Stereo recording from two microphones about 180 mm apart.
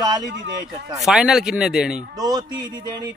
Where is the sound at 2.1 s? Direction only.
20° right (ahead or behind).